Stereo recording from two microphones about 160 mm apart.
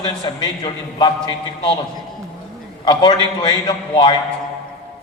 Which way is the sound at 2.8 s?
30° left (ahead or behind).